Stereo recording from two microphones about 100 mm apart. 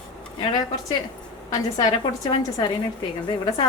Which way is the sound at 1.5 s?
40° left (ahead or behind).